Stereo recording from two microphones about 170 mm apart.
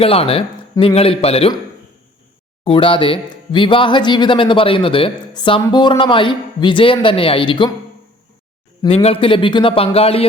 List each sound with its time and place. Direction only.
0.0 s a man's voice: 35° left (ahead or behind)
2.6 s speech: 30° left (ahead or behind)
8.8 s a man's voice: 35° left (ahead or behind)